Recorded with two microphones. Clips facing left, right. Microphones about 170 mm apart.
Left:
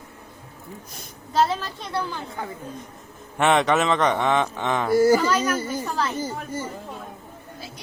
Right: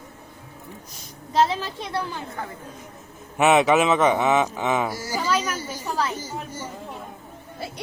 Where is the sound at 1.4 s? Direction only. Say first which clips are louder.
Right 1 dB; centre (ahead or behind).